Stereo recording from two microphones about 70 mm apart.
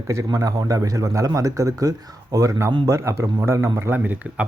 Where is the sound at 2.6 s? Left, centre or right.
Right.